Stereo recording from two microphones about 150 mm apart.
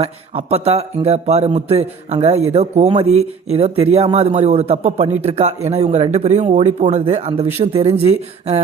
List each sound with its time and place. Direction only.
0.0 s speech: 45° right (ahead or behind)